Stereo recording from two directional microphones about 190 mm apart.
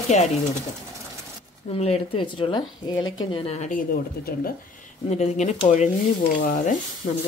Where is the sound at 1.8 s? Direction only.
30° left (ahead or behind).